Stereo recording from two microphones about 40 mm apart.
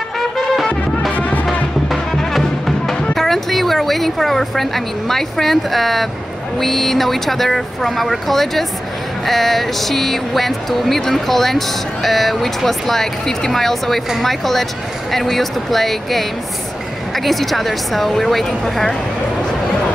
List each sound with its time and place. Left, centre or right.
1.1 s music: left
1.9 s music: centre
3.2 s a woman's voice: centre